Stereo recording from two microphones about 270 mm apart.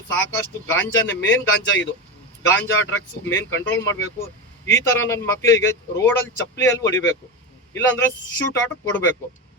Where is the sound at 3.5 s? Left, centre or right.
Left.